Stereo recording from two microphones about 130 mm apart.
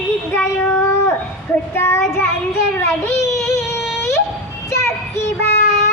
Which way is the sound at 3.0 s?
20° left (ahead or behind).